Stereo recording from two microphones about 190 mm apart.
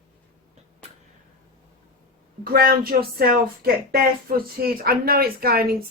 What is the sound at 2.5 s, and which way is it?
Speech, 50° right (ahead or behind).